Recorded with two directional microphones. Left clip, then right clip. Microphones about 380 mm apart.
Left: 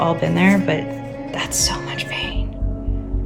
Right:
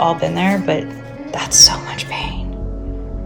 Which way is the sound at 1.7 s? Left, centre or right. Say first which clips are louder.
Right 2 dB; centre.